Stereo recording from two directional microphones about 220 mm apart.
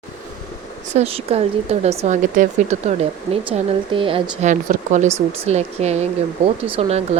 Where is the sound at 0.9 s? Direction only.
25° right (ahead or behind).